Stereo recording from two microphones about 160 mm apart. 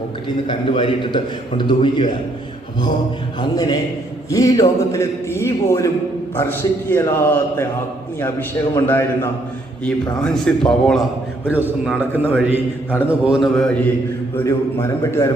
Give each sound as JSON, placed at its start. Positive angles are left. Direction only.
{"t": 0.4, "sound": "a man's voice", "side_deg": 30}
{"t": 3.5, "sound": "a man's voice", "side_deg": 25}
{"t": 9.8, "sound": "a man's voice", "side_deg": 5}
{"t": 11.4, "sound": "a man's voice", "side_deg": -10}
{"t": 14.3, "sound": "a man's voice", "side_deg": 20}